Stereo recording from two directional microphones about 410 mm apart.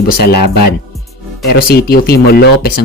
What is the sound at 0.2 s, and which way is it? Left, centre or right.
Speech, left.